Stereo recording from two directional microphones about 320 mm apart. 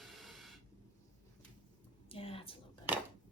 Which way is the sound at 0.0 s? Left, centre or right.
Centre.